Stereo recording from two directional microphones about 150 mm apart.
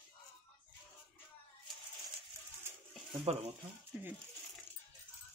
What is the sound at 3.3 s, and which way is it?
Speech, 45° right (ahead or behind).